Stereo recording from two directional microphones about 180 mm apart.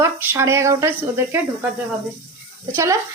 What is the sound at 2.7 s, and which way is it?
Speech, 15° right (ahead or behind).